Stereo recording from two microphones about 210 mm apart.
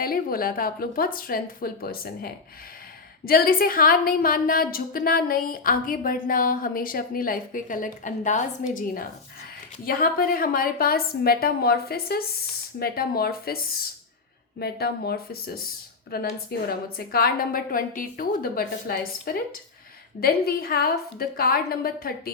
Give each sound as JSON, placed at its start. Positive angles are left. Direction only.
{"t": 0.0, "sound": "a woman's voice", "side_deg": 45}